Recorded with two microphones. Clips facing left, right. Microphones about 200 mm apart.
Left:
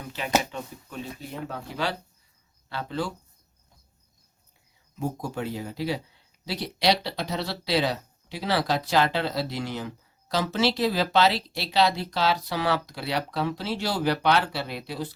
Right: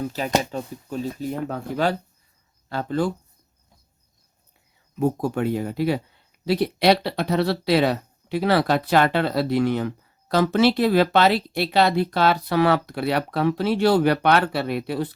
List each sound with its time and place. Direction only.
0.0 s speech: 40° right (ahead or behind)
4.9 s speech: 60° right (ahead or behind)